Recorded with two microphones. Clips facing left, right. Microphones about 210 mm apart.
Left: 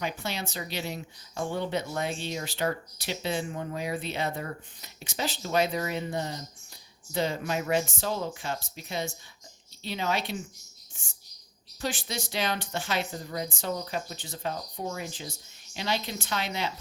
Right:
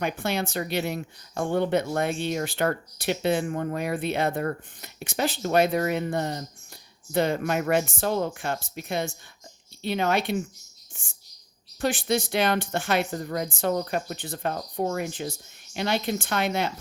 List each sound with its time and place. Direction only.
0.0 s speech: 55° right (ahead or behind)
11.8 s a woman's voice: 55° right (ahead or behind)